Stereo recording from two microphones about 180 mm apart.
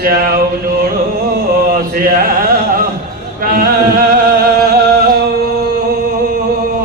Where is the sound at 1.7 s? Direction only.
50° right (ahead or behind).